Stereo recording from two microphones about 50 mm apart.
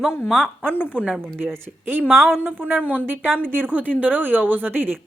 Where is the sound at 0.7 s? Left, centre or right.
Left.